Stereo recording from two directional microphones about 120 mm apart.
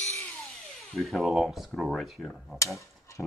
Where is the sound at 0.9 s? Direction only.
Centre (ahead or behind).